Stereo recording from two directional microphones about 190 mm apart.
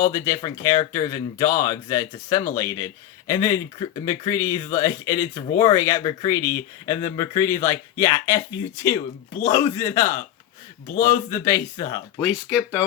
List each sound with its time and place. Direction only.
0.1 s speech: 15° left (ahead or behind)
12.2 s speech: 5° right (ahead or behind)